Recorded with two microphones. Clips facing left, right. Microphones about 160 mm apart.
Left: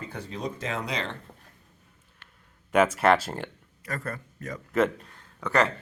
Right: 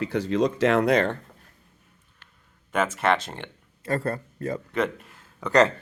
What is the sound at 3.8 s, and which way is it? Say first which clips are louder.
Speech: right 8 dB; 30° right (ahead or behind).